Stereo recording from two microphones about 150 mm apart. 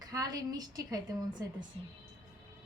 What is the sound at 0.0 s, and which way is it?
A woman's voice, 25° right (ahead or behind).